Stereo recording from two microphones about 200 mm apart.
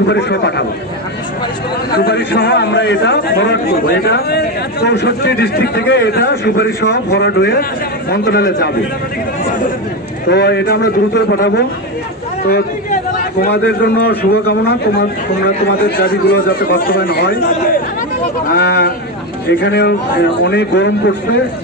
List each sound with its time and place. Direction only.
0.1 s a man's voice: 55° left (ahead or behind)
2.0 s a man's voice: 50° left (ahead or behind)
10.3 s a man's voice: 60° left (ahead or behind)